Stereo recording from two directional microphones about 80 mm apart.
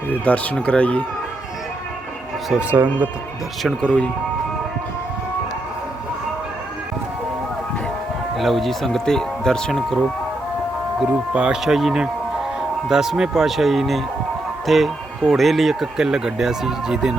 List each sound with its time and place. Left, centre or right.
0.1 s speech: centre
2.7 s speech: centre
3.8 s speech: centre
8.4 s speech: centre
11.0 s speech: centre